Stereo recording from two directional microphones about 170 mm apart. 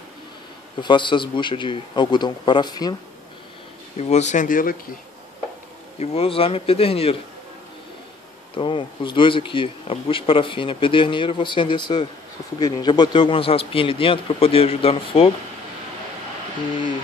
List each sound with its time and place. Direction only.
0.7 s a man's voice: 30° left (ahead or behind)
3.9 s speech: 40° left (ahead or behind)
5.9 s speech: 35° left (ahead or behind)
8.5 s speech: 30° left (ahead or behind)